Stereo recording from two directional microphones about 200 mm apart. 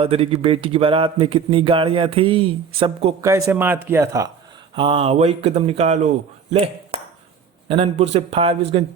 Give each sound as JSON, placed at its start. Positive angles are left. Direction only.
{"t": 0.0, "sound": "speech", "side_deg": -30}
{"t": 3.2, "sound": "speech", "side_deg": -15}
{"t": 4.7, "sound": "speech", "side_deg": -25}
{"t": 7.7, "sound": "speech", "side_deg": -30}